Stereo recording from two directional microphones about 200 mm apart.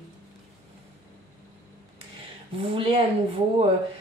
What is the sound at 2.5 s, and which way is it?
Speech, 25° right (ahead or behind).